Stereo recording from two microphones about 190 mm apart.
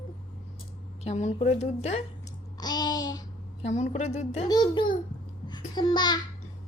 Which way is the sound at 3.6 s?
40° left (ahead or behind).